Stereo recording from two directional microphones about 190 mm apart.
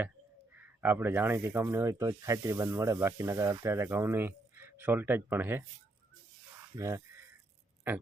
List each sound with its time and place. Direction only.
0.5 s speech: 10° right (ahead or behind)
6.7 s speech: 15° right (ahead or behind)